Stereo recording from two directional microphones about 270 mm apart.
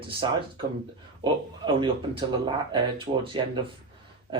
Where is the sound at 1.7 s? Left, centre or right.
Centre.